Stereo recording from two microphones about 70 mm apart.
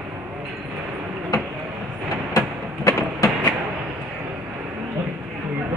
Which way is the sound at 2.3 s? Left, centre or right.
Left.